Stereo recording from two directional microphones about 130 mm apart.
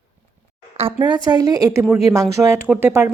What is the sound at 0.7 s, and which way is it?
A woman's voice, 40° right (ahead or behind).